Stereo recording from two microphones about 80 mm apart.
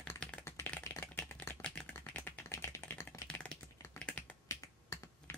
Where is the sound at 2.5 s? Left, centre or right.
Left.